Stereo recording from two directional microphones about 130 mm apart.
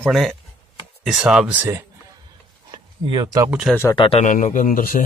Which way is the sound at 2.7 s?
35° right (ahead or behind).